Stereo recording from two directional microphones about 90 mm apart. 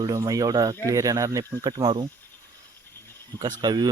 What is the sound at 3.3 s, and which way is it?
Speech, 50° right (ahead or behind).